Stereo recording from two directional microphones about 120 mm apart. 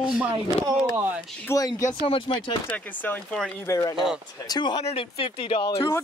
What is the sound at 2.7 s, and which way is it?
Speech, 15° left (ahead or behind).